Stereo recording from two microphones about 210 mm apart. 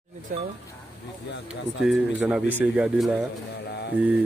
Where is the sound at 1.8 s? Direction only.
5° right (ahead or behind).